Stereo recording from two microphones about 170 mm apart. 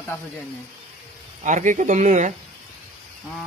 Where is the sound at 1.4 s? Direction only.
45° right (ahead or behind).